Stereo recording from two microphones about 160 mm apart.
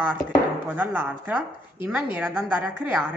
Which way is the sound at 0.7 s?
10° right (ahead or behind).